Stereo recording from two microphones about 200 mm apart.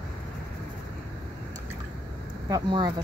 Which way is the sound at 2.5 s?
20° right (ahead or behind).